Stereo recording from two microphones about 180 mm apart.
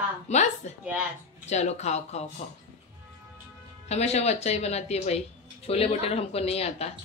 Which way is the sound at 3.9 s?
35° left (ahead or behind).